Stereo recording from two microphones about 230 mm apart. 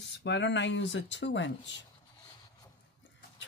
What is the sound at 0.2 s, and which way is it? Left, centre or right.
Speech, left.